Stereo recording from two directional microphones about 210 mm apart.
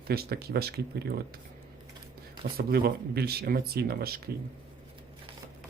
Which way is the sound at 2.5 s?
45° right (ahead or behind).